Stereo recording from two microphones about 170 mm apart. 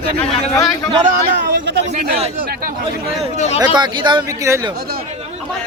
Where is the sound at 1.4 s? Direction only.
80° right.